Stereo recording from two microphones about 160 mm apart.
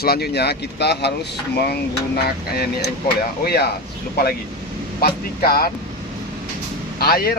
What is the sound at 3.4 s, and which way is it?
Speech, 80° left.